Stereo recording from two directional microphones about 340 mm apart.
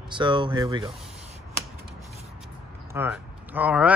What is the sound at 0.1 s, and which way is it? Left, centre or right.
Speech, centre.